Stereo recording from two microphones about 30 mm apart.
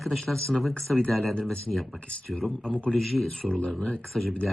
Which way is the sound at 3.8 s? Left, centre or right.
Left.